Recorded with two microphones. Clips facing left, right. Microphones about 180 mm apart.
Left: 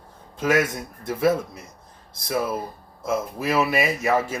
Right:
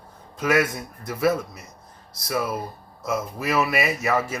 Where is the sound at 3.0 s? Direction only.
25° left (ahead or behind).